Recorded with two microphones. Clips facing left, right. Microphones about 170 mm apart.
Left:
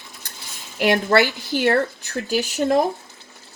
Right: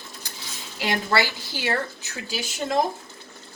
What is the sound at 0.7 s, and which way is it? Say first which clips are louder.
Speech: left 7 dB; 60° left (ahead or behind).